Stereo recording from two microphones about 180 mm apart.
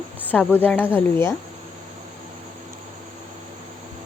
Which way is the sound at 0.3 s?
10° left (ahead or behind).